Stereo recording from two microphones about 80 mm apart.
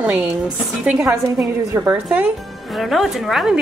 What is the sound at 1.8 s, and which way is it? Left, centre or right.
Speech, right.